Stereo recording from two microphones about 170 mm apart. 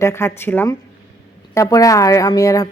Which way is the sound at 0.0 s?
15° left (ahead or behind).